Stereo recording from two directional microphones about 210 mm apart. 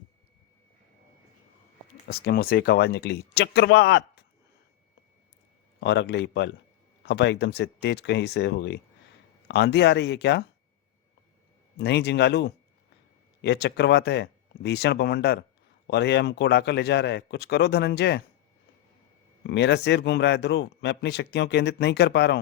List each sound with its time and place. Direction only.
2.0 s speech: 50° left (ahead or behind)
5.8 s speech: 55° left (ahead or behind)
11.8 s speech: 50° left (ahead or behind)
19.5 s speech: 55° left (ahead or behind)